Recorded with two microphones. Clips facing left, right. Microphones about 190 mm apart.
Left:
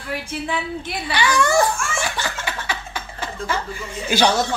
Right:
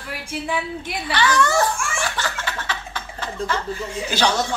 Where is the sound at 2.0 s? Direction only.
15° left (ahead or behind).